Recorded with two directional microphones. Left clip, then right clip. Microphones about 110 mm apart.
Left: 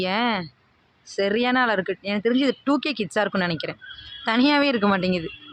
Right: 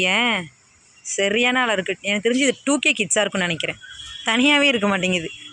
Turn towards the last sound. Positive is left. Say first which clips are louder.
# right 2 dB
turn(degrees=5)  # may be behind; listen again after turning